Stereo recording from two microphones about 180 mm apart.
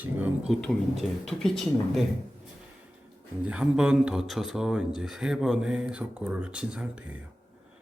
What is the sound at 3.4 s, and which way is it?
Speech, 5° right (ahead or behind).